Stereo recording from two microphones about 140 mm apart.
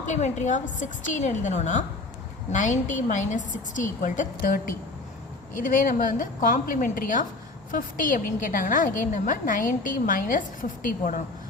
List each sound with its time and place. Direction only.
0.1 s a woman's voice: 55° left (ahead or behind); by 11.2 s 70° left (ahead or behind)